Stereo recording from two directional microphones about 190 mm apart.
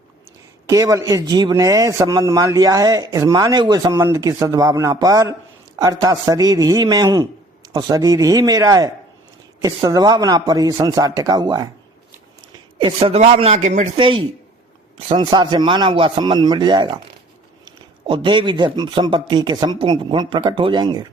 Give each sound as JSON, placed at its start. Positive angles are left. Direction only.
{"t": 0.7, "sound": "speech", "side_deg": -15}
{"t": 12.8, "sound": "speech", "side_deg": -30}
{"t": 13.9, "sound": "speech", "side_deg": -25}